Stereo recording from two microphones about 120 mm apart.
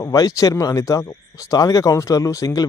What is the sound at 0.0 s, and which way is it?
Speech, 30° left (ahead or behind).